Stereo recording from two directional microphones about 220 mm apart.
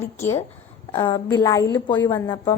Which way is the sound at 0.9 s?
20° left (ahead or behind).